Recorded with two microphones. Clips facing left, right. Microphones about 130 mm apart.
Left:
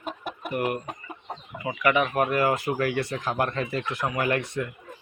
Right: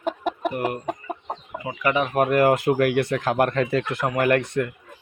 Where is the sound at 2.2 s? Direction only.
55° right (ahead or behind).